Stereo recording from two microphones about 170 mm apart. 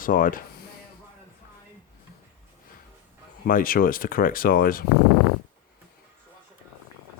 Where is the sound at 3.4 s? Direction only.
55° left (ahead or behind).